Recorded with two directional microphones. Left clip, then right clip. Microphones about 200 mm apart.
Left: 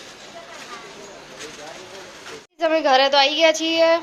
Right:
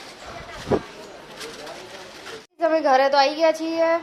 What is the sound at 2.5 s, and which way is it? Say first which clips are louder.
Child singing: left 1 dB; 5° right (ahead or behind).